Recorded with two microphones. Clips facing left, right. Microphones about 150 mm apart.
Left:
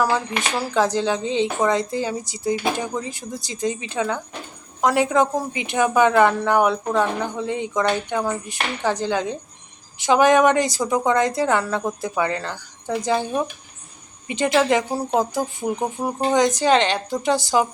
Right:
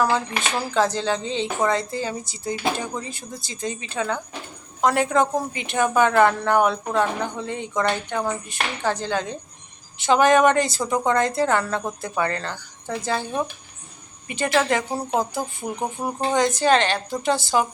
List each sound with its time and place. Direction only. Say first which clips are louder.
0.7 s a woman's voice: left 2 dB; 15° left (ahead or behind)